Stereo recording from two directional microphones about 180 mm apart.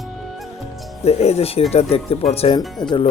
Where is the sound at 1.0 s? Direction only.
35° left (ahead or behind).